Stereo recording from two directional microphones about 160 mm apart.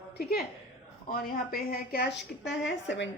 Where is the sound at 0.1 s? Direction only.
75° left (ahead or behind).